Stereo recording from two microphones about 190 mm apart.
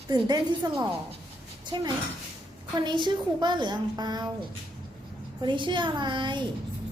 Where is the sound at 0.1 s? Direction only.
20° right (ahead or behind).